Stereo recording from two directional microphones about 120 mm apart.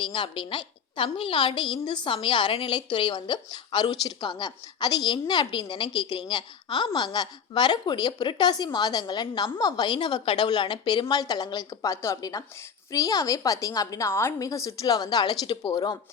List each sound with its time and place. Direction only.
0.0 s a woman's voice: 45° left (ahead or behind)